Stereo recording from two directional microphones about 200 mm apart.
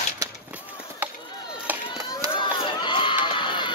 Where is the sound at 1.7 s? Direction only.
10° right (ahead or behind).